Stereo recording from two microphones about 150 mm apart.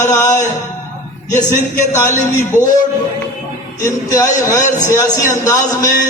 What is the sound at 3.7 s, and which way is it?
A man's voice, 20° left (ahead or behind).